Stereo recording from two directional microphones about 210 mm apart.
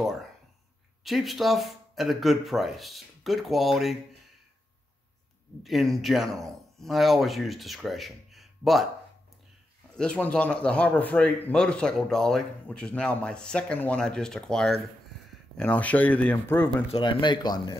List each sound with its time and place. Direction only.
1.0 s speech: centre (ahead or behind)
5.6 s speech: centre (ahead or behind)
9.9 s speech: 5° left (ahead or behind)
16.9 s speech: 25° left (ahead or behind)